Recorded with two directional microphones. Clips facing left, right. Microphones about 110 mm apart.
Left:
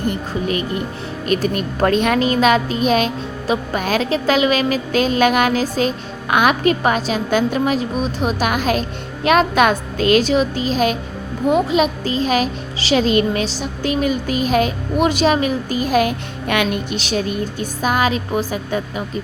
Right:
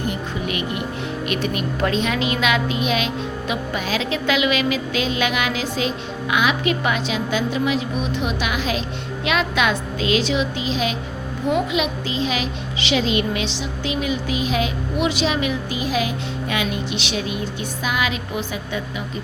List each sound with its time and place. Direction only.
0.4 s a child's voice: 35° left (ahead or behind)